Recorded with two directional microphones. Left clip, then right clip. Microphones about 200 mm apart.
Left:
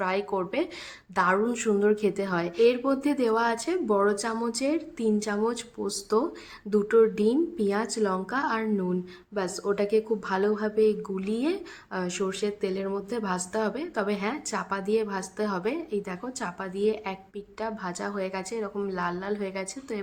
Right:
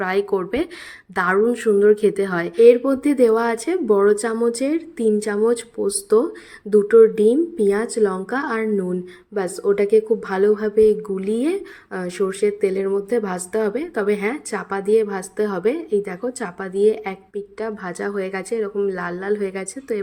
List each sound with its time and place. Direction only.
0.0 s speech: 20° right (ahead or behind)